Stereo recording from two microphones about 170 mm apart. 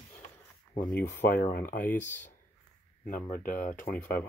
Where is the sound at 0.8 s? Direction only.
5° left (ahead or behind).